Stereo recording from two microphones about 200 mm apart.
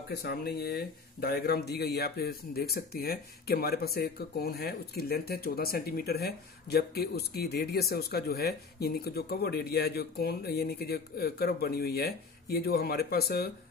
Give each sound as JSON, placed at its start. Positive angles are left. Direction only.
{"t": 0.1, "sound": "speech", "side_deg": 50}